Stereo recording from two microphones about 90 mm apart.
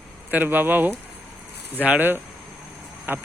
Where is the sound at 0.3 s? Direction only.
20° right (ahead or behind).